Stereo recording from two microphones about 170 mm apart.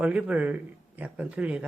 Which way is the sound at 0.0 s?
5° right (ahead or behind).